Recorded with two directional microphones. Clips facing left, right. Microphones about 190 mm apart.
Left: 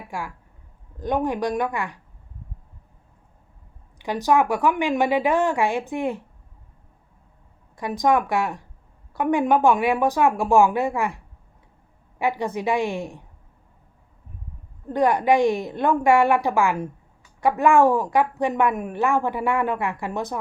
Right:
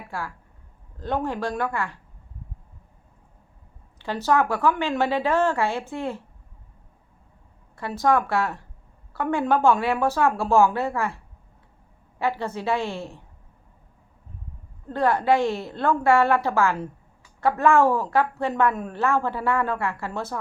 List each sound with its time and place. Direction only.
0.1 s a woman's voice: 15° left (ahead or behind)
3.9 s a woman's voice: 15° left (ahead or behind)
7.8 s a woman's voice: 15° left (ahead or behind)
12.2 s a woman's voice: 15° left (ahead or behind)
14.8 s a woman's voice: 15° left (ahead or behind)